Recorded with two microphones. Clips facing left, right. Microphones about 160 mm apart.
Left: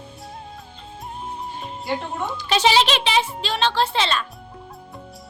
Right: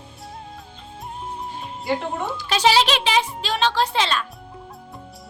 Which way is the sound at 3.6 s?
10° right (ahead or behind).